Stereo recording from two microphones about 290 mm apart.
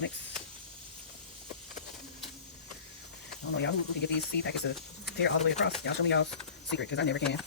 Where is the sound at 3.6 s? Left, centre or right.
Left.